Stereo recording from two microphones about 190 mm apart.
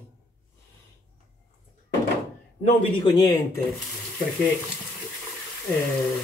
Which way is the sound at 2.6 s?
25° left (ahead or behind).